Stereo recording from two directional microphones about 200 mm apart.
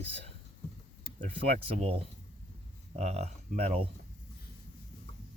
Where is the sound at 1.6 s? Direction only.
30° right (ahead or behind).